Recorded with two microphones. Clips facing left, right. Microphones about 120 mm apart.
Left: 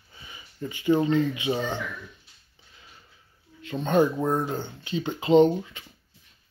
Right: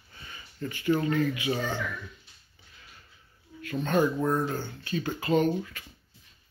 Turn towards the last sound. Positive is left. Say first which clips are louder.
# left 7 dB
turn(degrees=25)  # may be behind; listen again after turning